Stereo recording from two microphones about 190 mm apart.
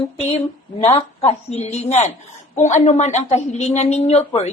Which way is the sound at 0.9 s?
30° left (ahead or behind).